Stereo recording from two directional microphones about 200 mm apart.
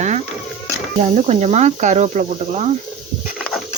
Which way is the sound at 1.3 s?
35° right (ahead or behind).